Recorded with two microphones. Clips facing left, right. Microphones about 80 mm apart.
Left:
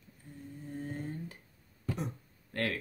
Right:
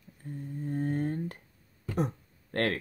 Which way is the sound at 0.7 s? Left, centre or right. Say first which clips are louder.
Right 9 dB; right.